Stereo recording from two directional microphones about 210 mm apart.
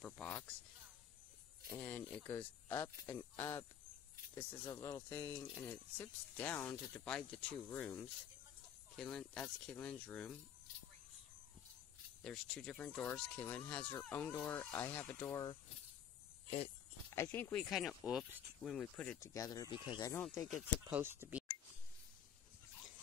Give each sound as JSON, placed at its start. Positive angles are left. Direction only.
{"t": 0.0, "sound": "speech", "side_deg": 5}
{"t": 1.8, "sound": "speech", "side_deg": 10}
{"t": 12.2, "sound": "speech", "side_deg": 0}
{"t": 16.4, "sound": "a sound", "side_deg": 30}
{"t": 17.1, "sound": "speech", "side_deg": 10}
{"t": 20.4, "sound": "speech", "side_deg": -5}